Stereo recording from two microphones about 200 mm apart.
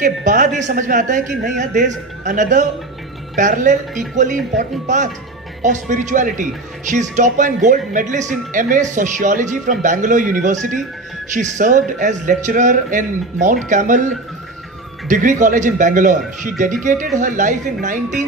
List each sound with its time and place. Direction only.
0.0 s a man's voice: 40° right (ahead or behind)